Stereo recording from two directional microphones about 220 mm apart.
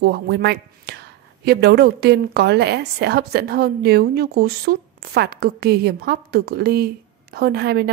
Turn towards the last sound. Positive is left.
turn(degrees=-45)  # may be behind; listen again after turning